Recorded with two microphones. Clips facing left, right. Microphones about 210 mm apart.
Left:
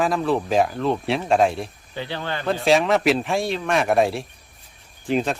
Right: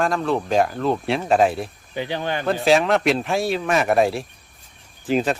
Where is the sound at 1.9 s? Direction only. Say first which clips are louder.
Right 4 dB; 15° right (ahead or behind).